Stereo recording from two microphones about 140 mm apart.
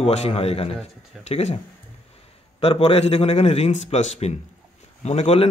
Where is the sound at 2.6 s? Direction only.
45° left (ahead or behind).